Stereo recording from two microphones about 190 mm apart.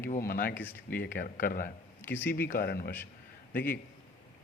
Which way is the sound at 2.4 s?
50° left (ahead or behind).